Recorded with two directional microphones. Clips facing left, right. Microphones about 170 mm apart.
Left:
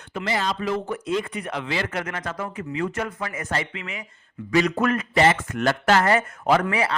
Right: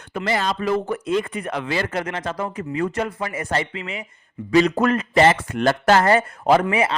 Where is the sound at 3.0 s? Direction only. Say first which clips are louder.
Right 4 dB; 30° right (ahead or behind).